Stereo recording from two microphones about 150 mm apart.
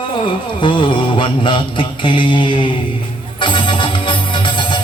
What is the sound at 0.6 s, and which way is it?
Music, 35° left (ahead or behind).